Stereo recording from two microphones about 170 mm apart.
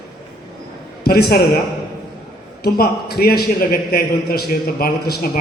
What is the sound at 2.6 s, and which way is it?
A man's voice, 65° left (ahead or behind).